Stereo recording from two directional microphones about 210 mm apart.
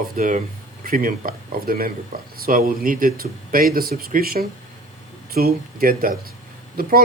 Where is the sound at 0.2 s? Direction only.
40° right (ahead or behind).